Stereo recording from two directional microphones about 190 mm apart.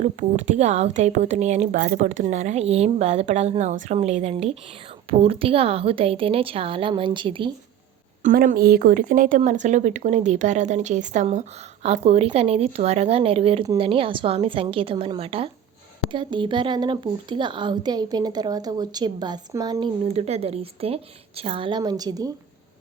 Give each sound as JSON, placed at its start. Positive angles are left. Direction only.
{"t": 0.0, "sound": "a woman's voice", "side_deg": -40}
{"t": 8.2, "sound": "a woman's voice", "side_deg": -45}
{"t": 20.1, "sound": "speech", "side_deg": -35}